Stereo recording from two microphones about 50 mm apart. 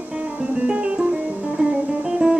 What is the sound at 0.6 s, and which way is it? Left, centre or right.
Music, right.